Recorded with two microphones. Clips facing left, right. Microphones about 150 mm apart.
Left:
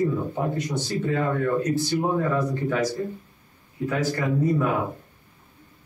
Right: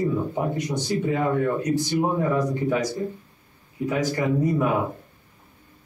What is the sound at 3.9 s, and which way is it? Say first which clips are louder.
Speech: right 1 dB; 15° right (ahead or behind).